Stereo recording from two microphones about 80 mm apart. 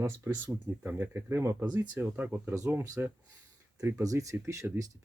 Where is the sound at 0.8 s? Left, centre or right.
Right.